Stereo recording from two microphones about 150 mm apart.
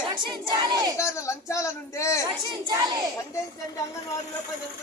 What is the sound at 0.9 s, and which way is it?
Speech, 20° left (ahead or behind).